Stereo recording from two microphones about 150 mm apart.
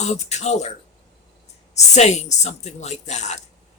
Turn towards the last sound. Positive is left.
turn(degrees=50)  # may be behind; listen again after turning